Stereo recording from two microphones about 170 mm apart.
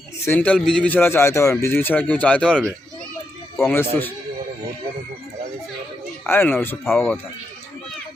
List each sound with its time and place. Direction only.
0.3 s a man's voice: 10° left (ahead or behind)
6.2 s a man's voice: 10° left (ahead or behind)